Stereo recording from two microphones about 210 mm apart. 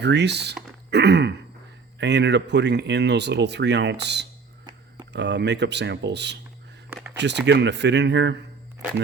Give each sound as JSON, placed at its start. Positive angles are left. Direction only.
{"t": 0.0, "sound": "speech", "side_deg": -55}
{"t": 0.9, "sound": "throat clearing", "side_deg": -50}
{"t": 2.0, "sound": "speech", "side_deg": -55}
{"t": 6.9, "sound": "a sound", "side_deg": -10}
{"t": 7.2, "sound": "speech", "side_deg": -55}